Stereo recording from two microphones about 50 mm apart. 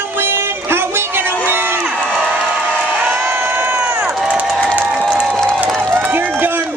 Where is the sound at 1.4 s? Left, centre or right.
Right.